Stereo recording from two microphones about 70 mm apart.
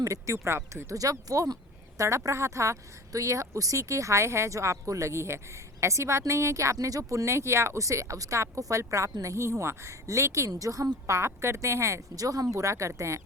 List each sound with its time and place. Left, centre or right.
0.0 s a woman's voice: right
11.0 s a woman's voice: right